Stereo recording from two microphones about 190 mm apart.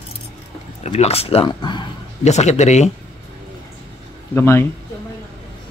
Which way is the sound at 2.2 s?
35° left (ahead or behind).